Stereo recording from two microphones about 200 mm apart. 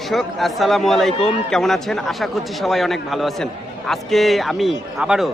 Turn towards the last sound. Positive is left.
turn(degrees=-5)  # may be behind; listen again after turning